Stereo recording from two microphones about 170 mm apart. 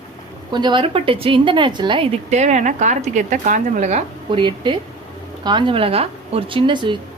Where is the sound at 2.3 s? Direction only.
45° right (ahead or behind).